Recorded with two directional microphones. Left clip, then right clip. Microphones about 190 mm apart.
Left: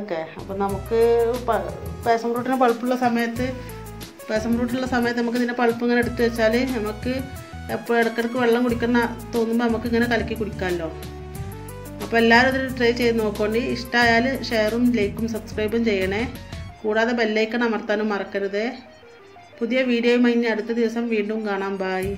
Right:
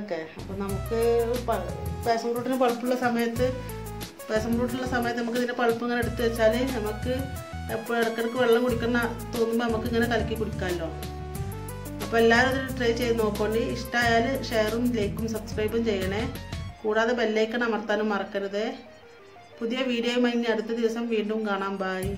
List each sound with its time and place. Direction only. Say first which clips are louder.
0.7 s speech: left 6 dB; centre (ahead or behind)
0.9 s speech: left 6 dB; 15° left (ahead or behind)
1.2 s speech: left 6 dB; centre (ahead or behind)
2.0 s speech: left 5 dB; 15° left (ahead or behind)
6.7 s speech: left 3 dB; centre (ahead or behind)
8.4 s speech: left 2 dB; 5° left (ahead or behind)
12.0 s speech: left 4 dB; 5° left (ahead or behind)